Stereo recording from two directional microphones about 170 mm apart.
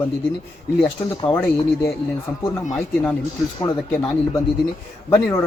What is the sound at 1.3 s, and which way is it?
Speech, 15° left (ahead or behind).